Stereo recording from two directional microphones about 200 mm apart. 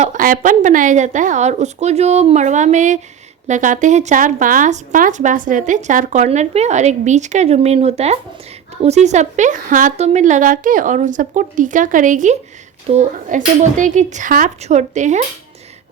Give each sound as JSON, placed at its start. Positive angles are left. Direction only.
{"t": 0.0, "sound": "speech", "side_deg": -40}